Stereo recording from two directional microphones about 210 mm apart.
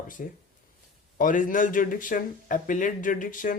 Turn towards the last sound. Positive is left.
turn(degrees=40)  # may be behind; listen again after turning